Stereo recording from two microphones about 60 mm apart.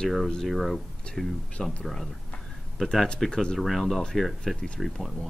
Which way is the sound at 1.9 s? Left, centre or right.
Centre.